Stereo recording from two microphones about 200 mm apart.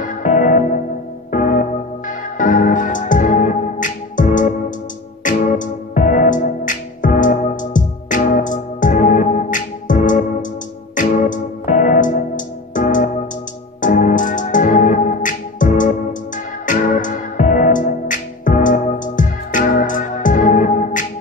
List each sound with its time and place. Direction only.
0.0 s music: 40° left (ahead or behind)